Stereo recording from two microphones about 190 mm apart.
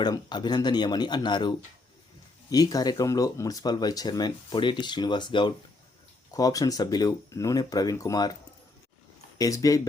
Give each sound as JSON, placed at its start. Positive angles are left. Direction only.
{"t": 0.0, "sound": "speech", "side_deg": 20}
{"t": 9.4, "sound": "speech", "side_deg": 20}